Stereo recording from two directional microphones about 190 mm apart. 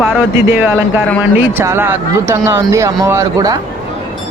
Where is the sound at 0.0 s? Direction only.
5° right (ahead or behind).